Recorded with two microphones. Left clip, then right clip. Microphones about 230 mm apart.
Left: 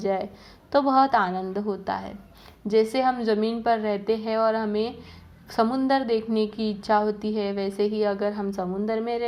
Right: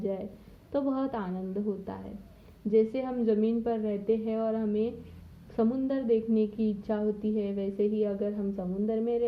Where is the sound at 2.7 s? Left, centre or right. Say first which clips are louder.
Left 6 dB; left.